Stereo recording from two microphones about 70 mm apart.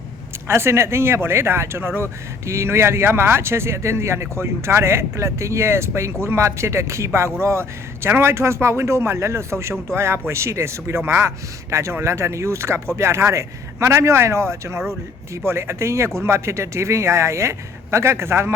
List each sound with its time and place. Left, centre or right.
0.4 s speech: right